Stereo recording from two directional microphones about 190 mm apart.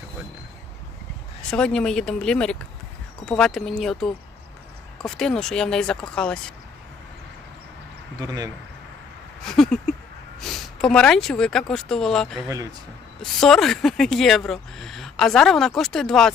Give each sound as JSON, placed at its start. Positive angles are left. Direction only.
{"t": 1.5, "sound": "speech", "side_deg": 5}
{"t": 8.2, "sound": "speech", "side_deg": -20}
{"t": 9.4, "sound": "speech", "side_deg": 0}